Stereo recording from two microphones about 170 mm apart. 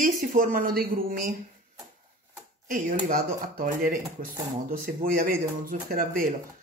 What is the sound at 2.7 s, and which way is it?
Speech, 55° right (ahead or behind).